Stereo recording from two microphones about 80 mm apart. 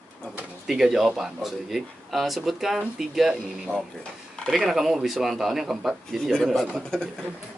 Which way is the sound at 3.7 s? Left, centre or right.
Right.